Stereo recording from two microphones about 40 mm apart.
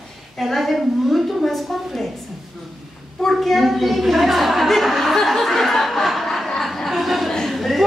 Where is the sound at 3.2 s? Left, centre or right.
Centre.